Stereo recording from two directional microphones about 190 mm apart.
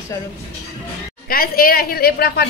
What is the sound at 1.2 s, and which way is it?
A woman's voice, 50° left (ahead or behind).